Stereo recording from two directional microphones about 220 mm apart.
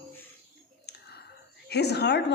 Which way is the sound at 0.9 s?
50° left (ahead or behind).